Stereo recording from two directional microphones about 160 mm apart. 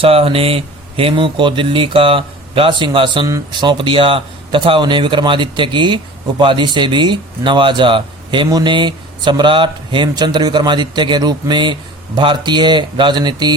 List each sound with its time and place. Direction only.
0.0 s speech: 35° right (ahead or behind)